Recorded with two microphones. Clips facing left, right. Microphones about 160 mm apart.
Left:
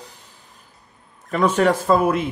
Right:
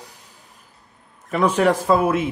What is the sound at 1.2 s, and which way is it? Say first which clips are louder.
Speech: even; 10° right (ahead or behind).